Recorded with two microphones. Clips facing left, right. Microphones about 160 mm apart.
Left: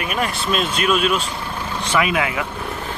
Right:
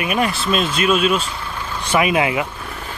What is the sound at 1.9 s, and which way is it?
Speech, 20° right (ahead or behind).